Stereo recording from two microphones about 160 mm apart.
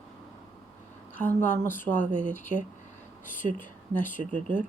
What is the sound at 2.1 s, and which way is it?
Speech, 50° left (ahead or behind).